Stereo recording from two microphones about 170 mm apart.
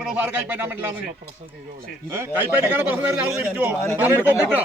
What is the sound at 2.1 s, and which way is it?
A man's voice, 15° right (ahead or behind).